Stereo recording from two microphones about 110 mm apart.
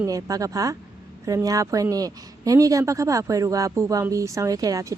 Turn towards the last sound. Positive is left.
turn(degrees=-35)  # may be behind; listen again after turning